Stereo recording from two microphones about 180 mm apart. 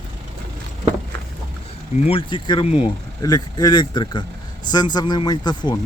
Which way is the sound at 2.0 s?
30° left (ahead or behind).